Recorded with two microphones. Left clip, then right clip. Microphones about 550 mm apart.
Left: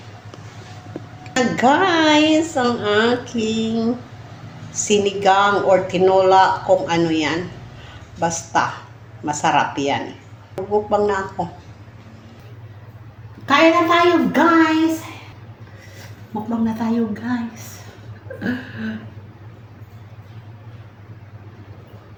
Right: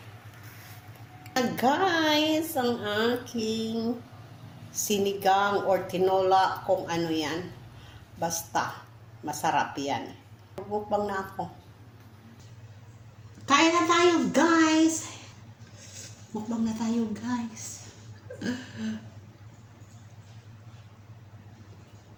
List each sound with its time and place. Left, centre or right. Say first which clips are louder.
1.4 s a woman's voice: left 9 dB; right
13.4 s a woman's voice: left 8 dB; right
16.6 s a woman's voice: left 9 dB; right
18.3 s a sound: left 9 dB; right